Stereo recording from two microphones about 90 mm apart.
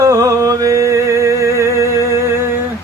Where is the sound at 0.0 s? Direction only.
35° right (ahead or behind).